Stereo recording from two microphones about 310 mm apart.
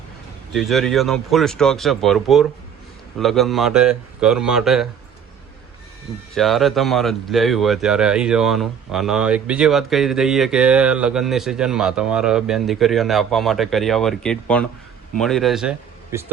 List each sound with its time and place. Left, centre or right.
0.5 s speech: centre
6.3 s speech: centre